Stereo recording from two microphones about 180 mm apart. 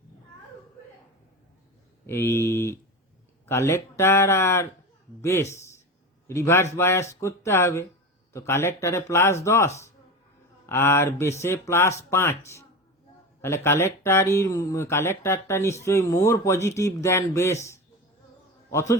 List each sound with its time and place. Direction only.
2.0 s a man's voice: 15° left (ahead or behind)